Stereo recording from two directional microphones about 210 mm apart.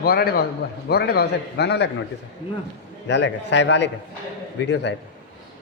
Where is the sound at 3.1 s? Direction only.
55° left (ahead or behind).